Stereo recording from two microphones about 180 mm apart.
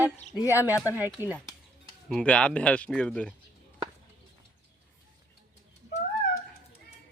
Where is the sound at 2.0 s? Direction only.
5° left (ahead or behind).